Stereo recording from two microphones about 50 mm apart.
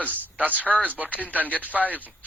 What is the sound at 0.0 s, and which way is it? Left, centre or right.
Speech, right.